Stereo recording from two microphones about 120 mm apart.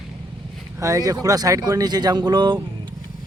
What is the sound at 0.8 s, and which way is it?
Speech, 30° right (ahead or behind).